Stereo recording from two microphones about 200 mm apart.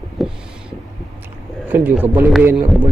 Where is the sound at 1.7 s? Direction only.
10° right (ahead or behind).